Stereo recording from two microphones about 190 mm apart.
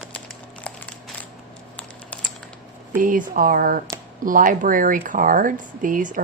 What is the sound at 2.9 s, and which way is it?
Speech, 45° right (ahead or behind).